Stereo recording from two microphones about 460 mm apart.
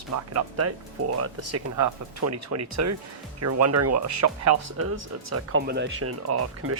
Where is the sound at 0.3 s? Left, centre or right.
Right.